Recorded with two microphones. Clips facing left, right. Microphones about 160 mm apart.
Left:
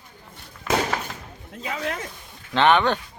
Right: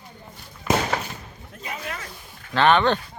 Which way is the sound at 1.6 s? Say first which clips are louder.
Left 4 dB; 90° left.